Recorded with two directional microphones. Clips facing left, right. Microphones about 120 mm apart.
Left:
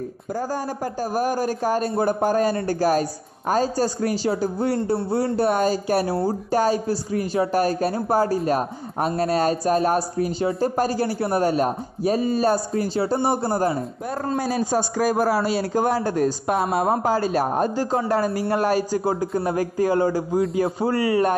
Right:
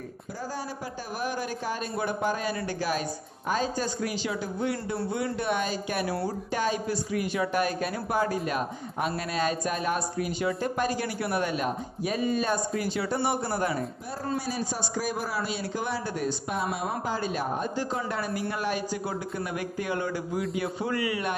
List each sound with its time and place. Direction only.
1.1 s speech: 40° left (ahead or behind)
14.3 s speech: 50° left (ahead or behind)